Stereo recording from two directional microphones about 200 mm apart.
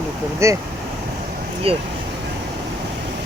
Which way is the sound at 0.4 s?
15° right (ahead or behind).